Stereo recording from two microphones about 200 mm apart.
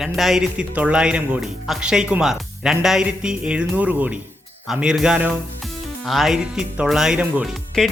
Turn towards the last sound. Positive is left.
turn(degrees=0)  # may be behind; listen again after turning